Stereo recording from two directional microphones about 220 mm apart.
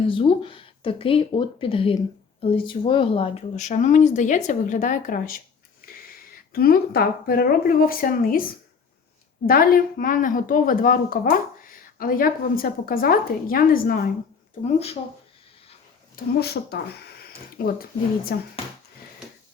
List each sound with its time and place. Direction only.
0.0 s speech: 25° left (ahead or behind); by 14.1 s 40° left (ahead or behind)
16.1 s speech: 45° left (ahead or behind)